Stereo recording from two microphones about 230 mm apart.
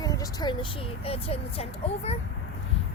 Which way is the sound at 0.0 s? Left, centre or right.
Centre.